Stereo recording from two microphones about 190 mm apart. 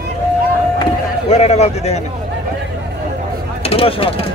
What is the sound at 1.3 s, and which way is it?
Speech, 35° left (ahead or behind).